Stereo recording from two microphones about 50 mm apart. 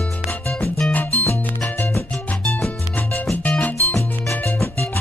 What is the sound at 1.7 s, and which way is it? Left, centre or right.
Music, left.